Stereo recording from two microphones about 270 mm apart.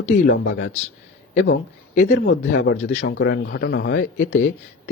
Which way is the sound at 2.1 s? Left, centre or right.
Left.